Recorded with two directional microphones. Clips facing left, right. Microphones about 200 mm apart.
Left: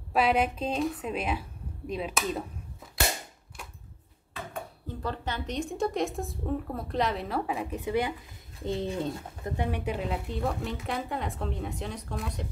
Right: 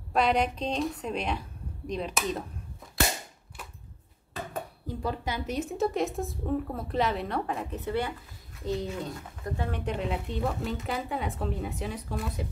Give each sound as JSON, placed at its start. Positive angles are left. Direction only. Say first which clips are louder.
{"t": 0.1, "sound": "a woman's voice", "louder": "even", "side_deg": 5}
{"t": 4.8, "sound": "a woman's voice", "louder": "right 2 dB", "side_deg": -10}
{"t": 8.6, "sound": "speech", "louder": "left 2 dB", "side_deg": 25}
{"t": 9.7, "sound": "a woman's voice", "louder": "right 2 dB", "side_deg": 10}